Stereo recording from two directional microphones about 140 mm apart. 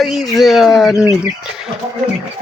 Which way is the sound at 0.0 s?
Centre (ahead or behind).